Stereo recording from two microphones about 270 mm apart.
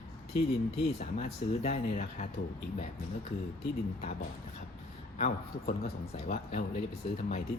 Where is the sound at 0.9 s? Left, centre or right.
Left.